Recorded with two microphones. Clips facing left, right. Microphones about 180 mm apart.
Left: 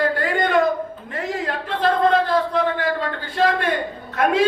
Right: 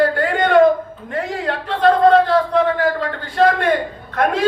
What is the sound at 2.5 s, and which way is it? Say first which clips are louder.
Speech: right 4 dB; 50° right (ahead or behind).